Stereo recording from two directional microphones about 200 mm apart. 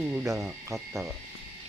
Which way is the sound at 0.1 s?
15° right (ahead or behind).